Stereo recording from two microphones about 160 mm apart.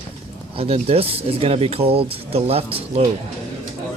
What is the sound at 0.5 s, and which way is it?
Speech, 35° right (ahead or behind).